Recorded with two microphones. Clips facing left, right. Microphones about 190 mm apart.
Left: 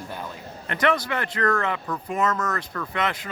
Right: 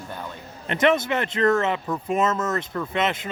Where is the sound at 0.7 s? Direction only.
20° right (ahead or behind).